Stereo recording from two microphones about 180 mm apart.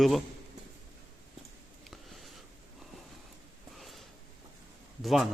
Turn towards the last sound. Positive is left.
turn(degrees=0)  # may be behind; listen again after turning